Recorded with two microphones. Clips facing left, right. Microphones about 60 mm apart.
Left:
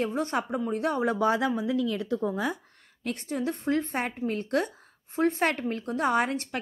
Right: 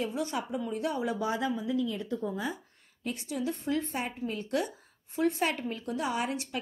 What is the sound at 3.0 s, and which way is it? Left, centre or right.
A woman's voice, left.